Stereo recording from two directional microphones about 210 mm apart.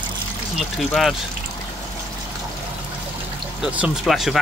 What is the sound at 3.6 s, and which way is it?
Speech, 5° right (ahead or behind).